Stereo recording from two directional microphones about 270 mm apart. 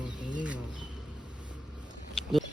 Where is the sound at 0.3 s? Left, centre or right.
Centre.